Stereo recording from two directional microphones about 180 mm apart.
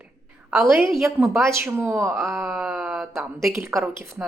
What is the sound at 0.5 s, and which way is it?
Speech, centre (ahead or behind).